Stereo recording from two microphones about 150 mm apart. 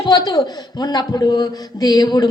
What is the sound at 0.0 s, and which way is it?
Speech, 25° left (ahead or behind).